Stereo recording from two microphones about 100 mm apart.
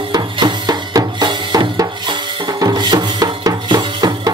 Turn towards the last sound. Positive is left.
turn(degrees=-45)  # may be behind; listen again after turning